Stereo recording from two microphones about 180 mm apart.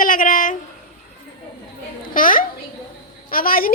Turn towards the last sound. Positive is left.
turn(degrees=55)  # may be behind; listen again after turning